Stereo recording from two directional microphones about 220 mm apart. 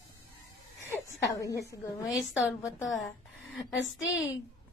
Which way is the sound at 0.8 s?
10° left (ahead or behind).